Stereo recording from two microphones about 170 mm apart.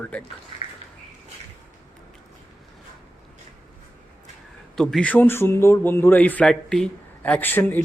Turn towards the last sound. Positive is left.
turn(degrees=10)  # may be behind; listen again after turning